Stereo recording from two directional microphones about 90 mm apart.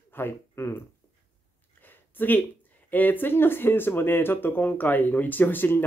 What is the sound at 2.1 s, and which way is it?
Speech, 20° left (ahead or behind).